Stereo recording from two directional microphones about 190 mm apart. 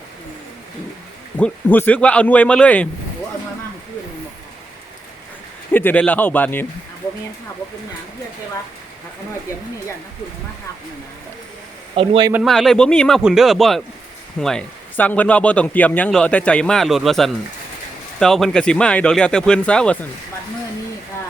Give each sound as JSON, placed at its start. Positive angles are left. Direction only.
{"t": 1.4, "sound": "speech", "side_deg": 10}
{"t": 5.7, "sound": "speech", "side_deg": 10}
{"t": 11.9, "sound": "speech", "side_deg": -25}
{"t": 12.3, "sound": "speech", "side_deg": 0}